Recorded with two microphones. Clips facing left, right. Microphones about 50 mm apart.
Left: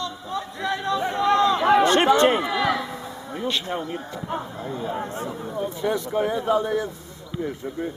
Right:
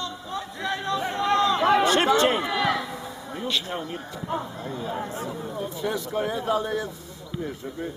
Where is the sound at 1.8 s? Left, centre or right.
Left.